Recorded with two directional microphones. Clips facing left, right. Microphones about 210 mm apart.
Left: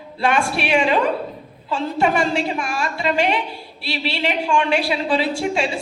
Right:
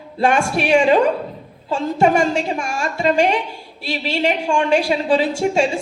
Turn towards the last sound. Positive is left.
turn(degrees=-45)  # may be behind; listen again after turning